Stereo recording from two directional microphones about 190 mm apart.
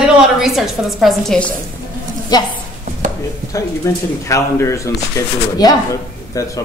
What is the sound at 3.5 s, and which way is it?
Speech, 15° left (ahead or behind).